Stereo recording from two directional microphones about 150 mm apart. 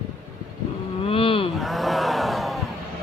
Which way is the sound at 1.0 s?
40° left (ahead or behind).